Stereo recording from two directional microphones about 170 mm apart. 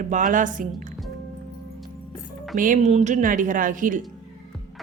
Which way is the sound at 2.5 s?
50° right (ahead or behind).